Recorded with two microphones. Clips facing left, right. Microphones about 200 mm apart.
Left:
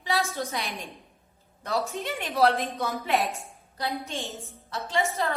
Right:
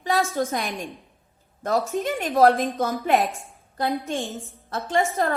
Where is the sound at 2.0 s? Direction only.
50° right (ahead or behind).